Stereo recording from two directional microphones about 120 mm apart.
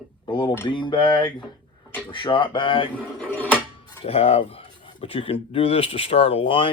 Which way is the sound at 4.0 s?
55° left (ahead or behind).